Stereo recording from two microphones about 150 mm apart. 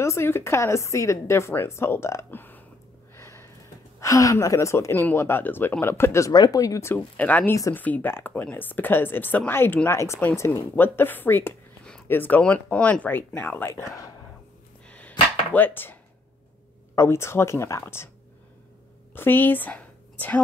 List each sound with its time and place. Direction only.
0.0 s speech: 20° left (ahead or behind)
3.2 s a sound: 20° left (ahead or behind)
4.0 s a woman's voice: 20° left (ahead or behind)
7.5 s a woman's voice: 20° left (ahead or behind)
14.9 s a sound: 10° left (ahead or behind)
16.9 s speech: 15° left (ahead or behind)
19.1 s speech: 15° left (ahead or behind)